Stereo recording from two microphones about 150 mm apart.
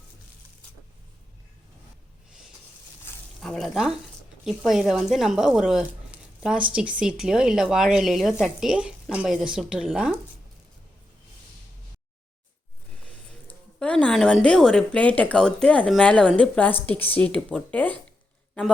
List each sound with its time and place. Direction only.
3.1 s a sound: 15° left (ahead or behind)
3.4 s speech: centre (ahead or behind)
13.7 s speech: 5° left (ahead or behind)